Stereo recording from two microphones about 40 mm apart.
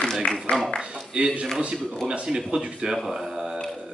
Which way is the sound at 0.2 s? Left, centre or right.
Left.